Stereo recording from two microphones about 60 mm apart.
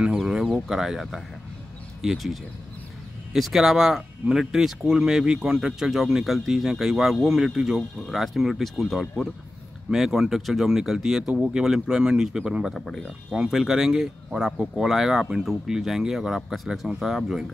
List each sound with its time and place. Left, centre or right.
0.2 s speech: centre
3.3 s speech: centre
12.7 s speech: centre
13.3 s speech: centre